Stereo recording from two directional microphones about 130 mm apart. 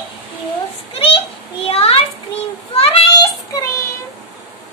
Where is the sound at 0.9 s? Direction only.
45° left (ahead or behind).